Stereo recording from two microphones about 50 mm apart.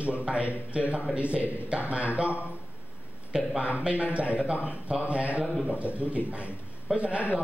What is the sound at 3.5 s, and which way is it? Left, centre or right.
Speech, right.